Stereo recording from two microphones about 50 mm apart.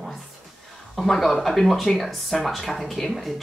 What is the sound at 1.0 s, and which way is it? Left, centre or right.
Speech, centre.